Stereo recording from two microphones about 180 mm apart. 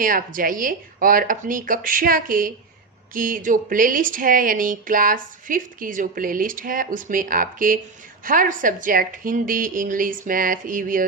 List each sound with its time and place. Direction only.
0.0 s speech: 50° right (ahead or behind)